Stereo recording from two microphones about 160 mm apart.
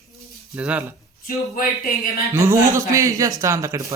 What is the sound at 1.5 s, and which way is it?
Speech, 60° left (ahead or behind).